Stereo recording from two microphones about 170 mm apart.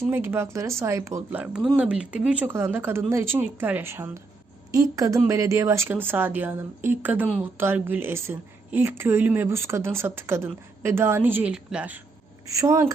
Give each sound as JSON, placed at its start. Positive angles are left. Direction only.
{"t": 0.0, "sound": "speech", "side_deg": -15}